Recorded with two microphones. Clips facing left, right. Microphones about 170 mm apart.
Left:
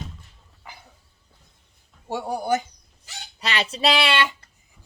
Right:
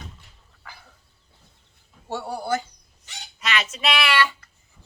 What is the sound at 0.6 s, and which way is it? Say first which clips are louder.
Dog: left 1 dB; 20° left (ahead or behind).